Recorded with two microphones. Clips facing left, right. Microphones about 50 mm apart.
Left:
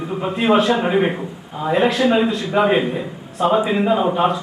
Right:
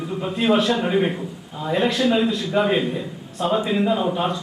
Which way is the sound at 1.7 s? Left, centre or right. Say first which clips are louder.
Left 3 dB; centre.